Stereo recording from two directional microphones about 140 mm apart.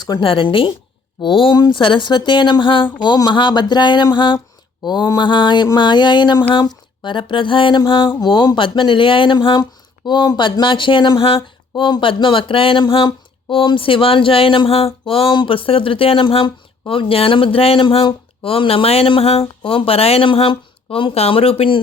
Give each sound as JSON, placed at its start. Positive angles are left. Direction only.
{"t": 0.0, "sound": "speech", "side_deg": 35}